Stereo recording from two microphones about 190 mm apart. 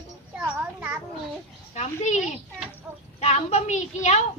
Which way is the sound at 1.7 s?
35° left (ahead or behind).